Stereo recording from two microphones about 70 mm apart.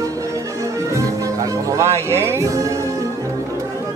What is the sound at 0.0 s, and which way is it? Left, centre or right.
Music, right.